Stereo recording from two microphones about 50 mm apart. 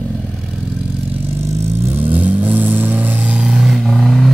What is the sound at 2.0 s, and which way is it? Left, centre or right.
Vehicle, right.